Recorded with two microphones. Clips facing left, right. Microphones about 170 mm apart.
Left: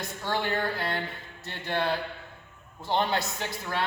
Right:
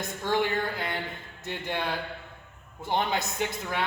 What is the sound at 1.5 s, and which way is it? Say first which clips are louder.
Speech: even; 15° right (ahead or behind).